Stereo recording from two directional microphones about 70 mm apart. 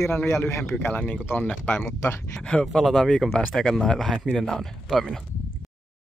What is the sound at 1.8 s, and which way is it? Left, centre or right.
Speech, left.